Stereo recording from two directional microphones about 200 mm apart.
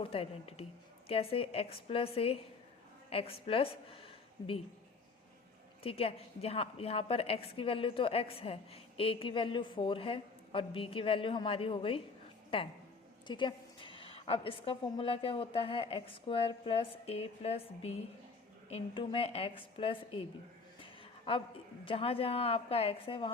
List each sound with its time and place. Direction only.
0.0 s a woman's voice: 30° left (ahead or behind)
5.8 s a woman's voice: 30° left (ahead or behind)
20.7 s a sound: 25° left (ahead or behind)
21.8 s a woman's voice: 30° left (ahead or behind)